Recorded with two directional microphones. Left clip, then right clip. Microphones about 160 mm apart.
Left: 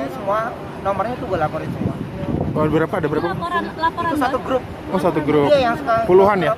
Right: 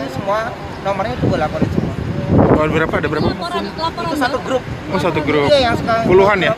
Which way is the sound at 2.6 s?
25° left (ahead or behind).